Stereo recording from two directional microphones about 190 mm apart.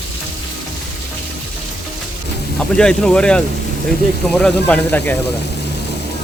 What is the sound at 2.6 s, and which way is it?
A man's voice, 5° left (ahead or behind).